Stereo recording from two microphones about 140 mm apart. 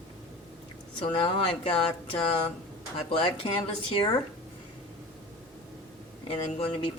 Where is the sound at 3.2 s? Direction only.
40° left (ahead or behind).